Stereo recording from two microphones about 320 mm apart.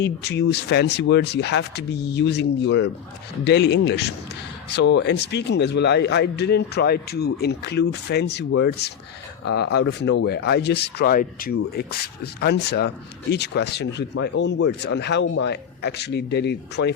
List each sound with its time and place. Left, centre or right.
0.0 s a man's voice: left